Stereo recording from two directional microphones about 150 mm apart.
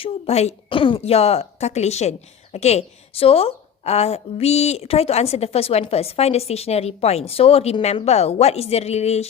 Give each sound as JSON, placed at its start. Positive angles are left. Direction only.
{"t": 0.0, "sound": "speech", "side_deg": 40}